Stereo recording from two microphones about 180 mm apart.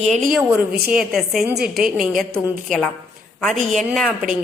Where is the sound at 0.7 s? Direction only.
55° right (ahead or behind).